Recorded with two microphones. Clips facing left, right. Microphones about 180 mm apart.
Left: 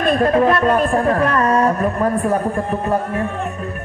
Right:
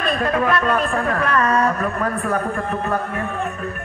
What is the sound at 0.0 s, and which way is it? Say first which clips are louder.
Speech: left 6 dB; 40° left (ahead or behind).